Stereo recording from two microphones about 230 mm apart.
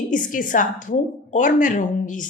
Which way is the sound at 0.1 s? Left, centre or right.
Left.